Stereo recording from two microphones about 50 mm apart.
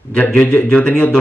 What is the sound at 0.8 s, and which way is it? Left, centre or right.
Speech, left.